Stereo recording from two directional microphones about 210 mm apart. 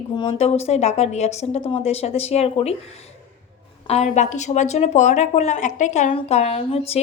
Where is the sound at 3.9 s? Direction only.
30° left (ahead or behind).